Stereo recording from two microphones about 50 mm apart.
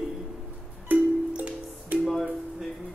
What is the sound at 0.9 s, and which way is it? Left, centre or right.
Music, right.